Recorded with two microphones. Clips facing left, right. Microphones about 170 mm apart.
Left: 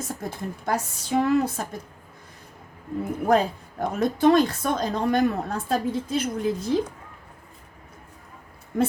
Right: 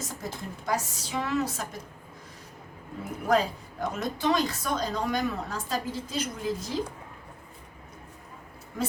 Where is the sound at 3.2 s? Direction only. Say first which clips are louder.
Left 3 dB; 55° left (ahead or behind).